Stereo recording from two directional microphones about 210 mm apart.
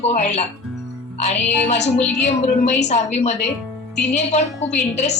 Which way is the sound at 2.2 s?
30° left (ahead or behind).